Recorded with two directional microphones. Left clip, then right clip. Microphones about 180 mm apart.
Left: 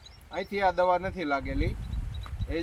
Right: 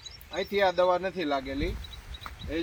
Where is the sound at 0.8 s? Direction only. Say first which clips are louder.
Even; 10° left (ahead or behind).